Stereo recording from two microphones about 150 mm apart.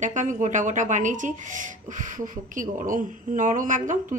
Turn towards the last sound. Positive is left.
turn(degrees=-60)  # may be behind; listen again after turning